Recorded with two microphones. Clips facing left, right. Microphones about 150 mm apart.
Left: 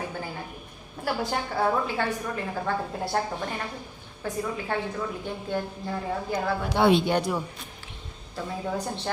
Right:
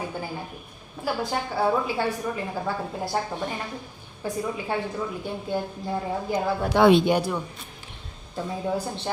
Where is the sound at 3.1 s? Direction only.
5° right (ahead or behind).